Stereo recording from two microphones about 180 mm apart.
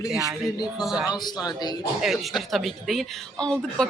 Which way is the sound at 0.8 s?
5° right (ahead or behind).